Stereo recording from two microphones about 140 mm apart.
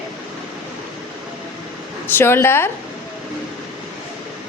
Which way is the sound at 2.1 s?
15° left (ahead or behind).